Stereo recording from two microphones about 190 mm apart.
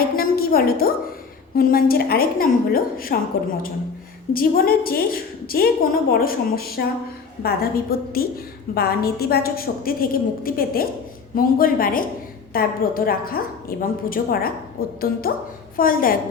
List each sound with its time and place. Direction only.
0.2 s a sound: 50° left (ahead or behind)
1.5 s a woman's voice: 50° left (ahead or behind)
4.4 s a woman's voice: 50° left (ahead or behind)